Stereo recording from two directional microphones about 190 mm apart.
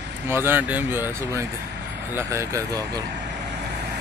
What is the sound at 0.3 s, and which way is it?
Speech, 10° right (ahead or behind).